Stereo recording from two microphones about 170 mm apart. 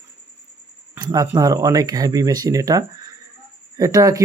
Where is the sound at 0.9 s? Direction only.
25° right (ahead or behind).